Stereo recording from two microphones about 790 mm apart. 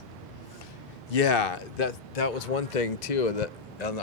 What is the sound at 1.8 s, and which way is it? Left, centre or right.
Speech, left.